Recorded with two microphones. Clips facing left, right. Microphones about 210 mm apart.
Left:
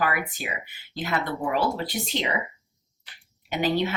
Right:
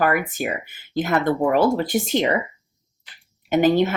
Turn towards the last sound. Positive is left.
turn(degrees=-50)  # may be behind; listen again after turning